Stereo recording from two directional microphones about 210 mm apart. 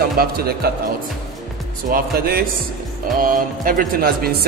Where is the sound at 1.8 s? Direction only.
45° right (ahead or behind).